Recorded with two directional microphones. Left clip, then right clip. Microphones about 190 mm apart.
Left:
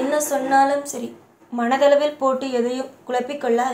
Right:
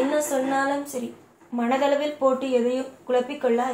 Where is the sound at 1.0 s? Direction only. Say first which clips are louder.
Left 1 dB; 45° left (ahead or behind).